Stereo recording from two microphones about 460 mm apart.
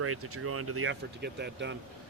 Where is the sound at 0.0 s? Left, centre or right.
Right.